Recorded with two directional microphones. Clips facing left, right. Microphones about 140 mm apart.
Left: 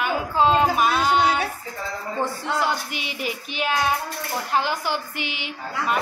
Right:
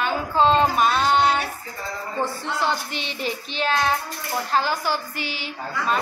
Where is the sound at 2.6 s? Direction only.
10° left (ahead or behind).